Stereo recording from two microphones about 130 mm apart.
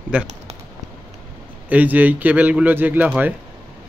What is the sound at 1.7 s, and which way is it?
Speech, 15° right (ahead or behind).